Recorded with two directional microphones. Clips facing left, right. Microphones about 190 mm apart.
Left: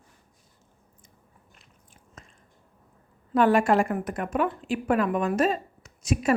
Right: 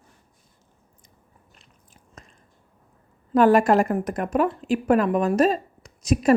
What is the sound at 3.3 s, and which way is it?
A woman's voice, 40° right (ahead or behind).